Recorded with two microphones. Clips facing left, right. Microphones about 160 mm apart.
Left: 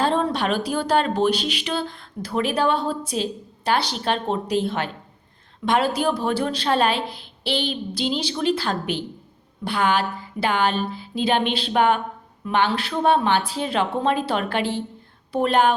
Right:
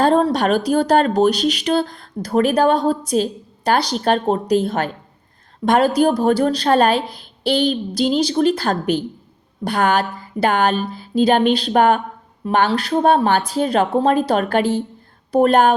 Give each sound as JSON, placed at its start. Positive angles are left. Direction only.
{"t": 0.0, "sound": "speech", "side_deg": -40}